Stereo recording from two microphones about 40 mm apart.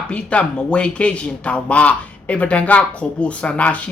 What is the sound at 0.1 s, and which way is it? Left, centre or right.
Speech, left.